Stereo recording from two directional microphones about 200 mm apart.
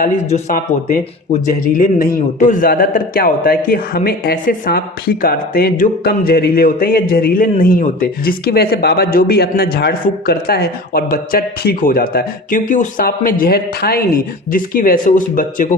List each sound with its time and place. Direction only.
0.0 s speech: 35° left (ahead or behind)